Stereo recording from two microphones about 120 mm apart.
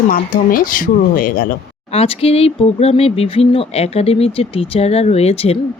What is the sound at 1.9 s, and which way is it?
A woman's voice, 55° left (ahead or behind).